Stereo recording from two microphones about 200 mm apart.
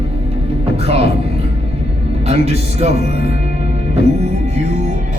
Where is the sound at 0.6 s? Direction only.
30° right (ahead or behind).